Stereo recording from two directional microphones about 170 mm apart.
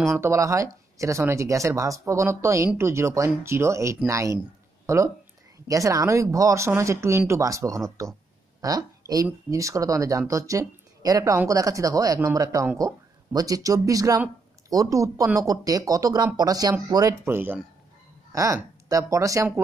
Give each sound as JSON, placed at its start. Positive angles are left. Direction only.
{"t": 0.2, "sound": "speech", "side_deg": -15}
{"t": 17.3, "sound": "speech", "side_deg": -10}